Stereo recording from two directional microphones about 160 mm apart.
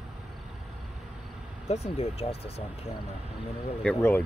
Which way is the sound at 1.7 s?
40° left (ahead or behind).